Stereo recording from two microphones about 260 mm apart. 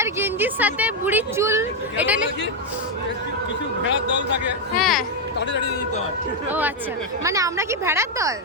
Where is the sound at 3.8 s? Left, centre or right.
Left.